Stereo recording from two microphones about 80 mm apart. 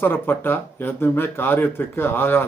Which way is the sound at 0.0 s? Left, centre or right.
Left.